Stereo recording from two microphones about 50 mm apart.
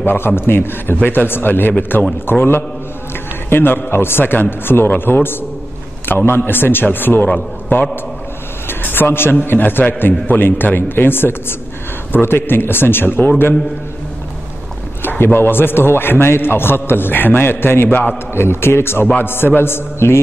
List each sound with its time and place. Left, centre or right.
0.0 s a man's voice: left
8.6 s a man's voice: left
15.0 s a man's voice: left
18.3 s a man's voice: left